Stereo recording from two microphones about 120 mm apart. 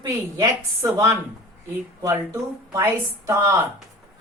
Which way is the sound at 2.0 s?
25° right (ahead or behind).